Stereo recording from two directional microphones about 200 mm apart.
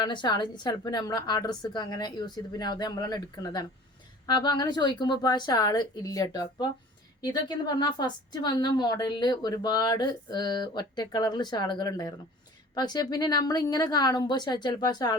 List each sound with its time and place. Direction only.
0.0 s a woman's voice: 20° left (ahead or behind)